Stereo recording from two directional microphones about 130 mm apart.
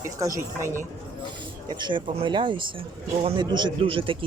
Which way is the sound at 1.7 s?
35° right (ahead or behind).